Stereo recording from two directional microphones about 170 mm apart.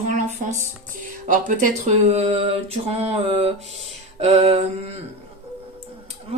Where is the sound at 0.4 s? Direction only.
45° right (ahead or behind).